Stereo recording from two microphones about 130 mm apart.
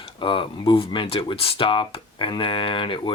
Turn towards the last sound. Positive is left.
turn(degrees=40)  # may be behind; listen again after turning